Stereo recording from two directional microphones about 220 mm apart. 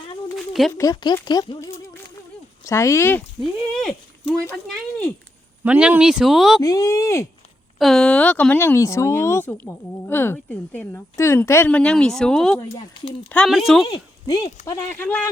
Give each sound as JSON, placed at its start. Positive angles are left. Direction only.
{"t": 0.7, "sound": "a woman's voice", "side_deg": 15}
{"t": 5.6, "sound": "speech", "side_deg": -5}
{"t": 6.6, "sound": "a woman's voice", "side_deg": 15}
{"t": 7.8, "sound": "a woman's voice", "side_deg": 0}
{"t": 12.5, "sound": "speech", "side_deg": 20}
{"t": 13.3, "sound": "speech", "side_deg": 0}
{"t": 13.8, "sound": "a woman's voice", "side_deg": 20}